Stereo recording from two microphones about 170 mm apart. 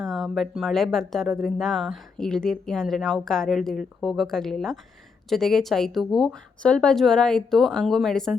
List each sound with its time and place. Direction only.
0.0 s speech: centre (ahead or behind)